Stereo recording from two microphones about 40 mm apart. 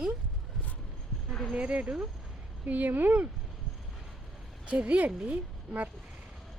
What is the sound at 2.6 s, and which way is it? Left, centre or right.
Speech, right.